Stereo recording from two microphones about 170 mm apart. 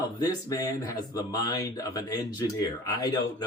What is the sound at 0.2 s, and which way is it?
Speech, 20° left (ahead or behind).